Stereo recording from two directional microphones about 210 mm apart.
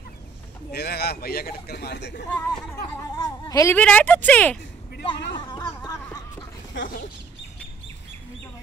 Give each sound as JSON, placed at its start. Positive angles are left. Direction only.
{"t": 0.7, "sound": "speech", "side_deg": 50}
{"t": 2.3, "sound": "speech", "side_deg": 10}
{"t": 5.0, "sound": "a sound", "side_deg": 20}